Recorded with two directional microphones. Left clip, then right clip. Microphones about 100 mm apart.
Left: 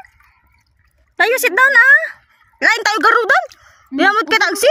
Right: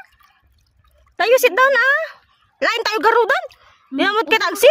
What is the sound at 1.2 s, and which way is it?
A woman's voice, 10° left (ahead or behind).